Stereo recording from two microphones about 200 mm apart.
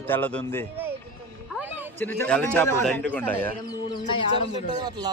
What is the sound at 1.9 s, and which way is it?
Speech, 10° left (ahead or behind).